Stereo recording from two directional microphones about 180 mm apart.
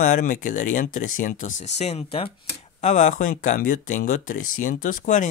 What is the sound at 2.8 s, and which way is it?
Speech, 45° left (ahead or behind).